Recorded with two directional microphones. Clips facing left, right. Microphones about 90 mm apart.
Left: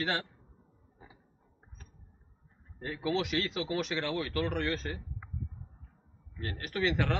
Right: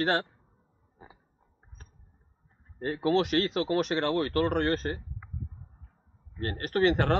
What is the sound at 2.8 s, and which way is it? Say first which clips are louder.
A man's voice: right 6 dB; 45° right (ahead or behind).